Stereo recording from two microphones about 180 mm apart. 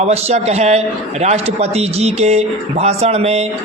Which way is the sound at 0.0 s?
35° right (ahead or behind).